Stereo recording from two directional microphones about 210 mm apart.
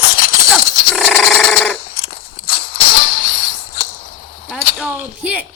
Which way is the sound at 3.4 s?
45° left (ahead or behind).